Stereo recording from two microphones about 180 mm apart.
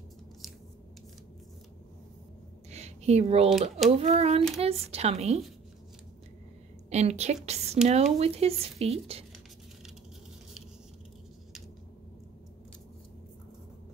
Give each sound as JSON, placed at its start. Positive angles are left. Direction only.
{"t": 2.7, "sound": "a sound", "side_deg": -35}
{"t": 3.9, "sound": "speech", "side_deg": -35}
{"t": 6.9, "sound": "speech", "side_deg": -35}